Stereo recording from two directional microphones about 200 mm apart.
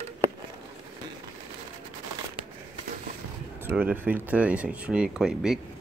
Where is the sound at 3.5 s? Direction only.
10° right (ahead or behind).